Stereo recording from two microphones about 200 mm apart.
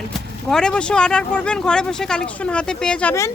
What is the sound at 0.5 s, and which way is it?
Speech, 5° left (ahead or behind).